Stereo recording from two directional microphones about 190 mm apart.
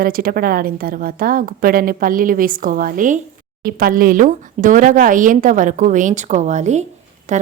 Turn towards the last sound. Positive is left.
turn(degrees=-40)  # may be behind; listen again after turning